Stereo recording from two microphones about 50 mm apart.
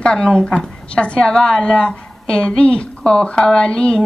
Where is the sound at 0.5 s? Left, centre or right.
Centre.